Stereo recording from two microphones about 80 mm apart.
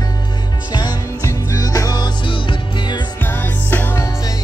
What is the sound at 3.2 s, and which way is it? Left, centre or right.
Music, left.